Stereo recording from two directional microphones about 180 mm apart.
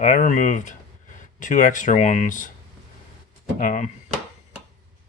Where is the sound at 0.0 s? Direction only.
45° left (ahead or behind).